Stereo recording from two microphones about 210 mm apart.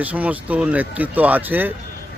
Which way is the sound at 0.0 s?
5° right (ahead or behind).